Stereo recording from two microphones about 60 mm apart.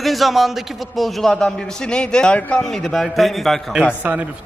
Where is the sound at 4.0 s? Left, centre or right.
Right.